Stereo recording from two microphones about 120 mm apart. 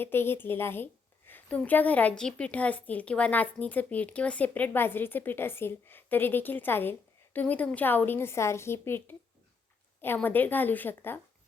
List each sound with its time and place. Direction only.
0.0 s a woman's voice: 20° left (ahead or behind)
10.2 s a woman's voice: 15° left (ahead or behind)